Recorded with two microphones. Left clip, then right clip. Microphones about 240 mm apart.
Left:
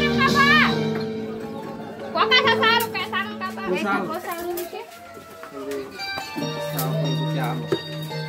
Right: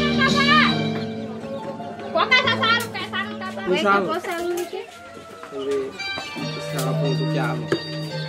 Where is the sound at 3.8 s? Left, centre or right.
Centre.